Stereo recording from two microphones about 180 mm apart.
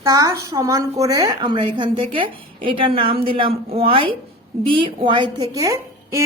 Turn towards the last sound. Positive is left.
turn(degrees=-15)  # may be behind; listen again after turning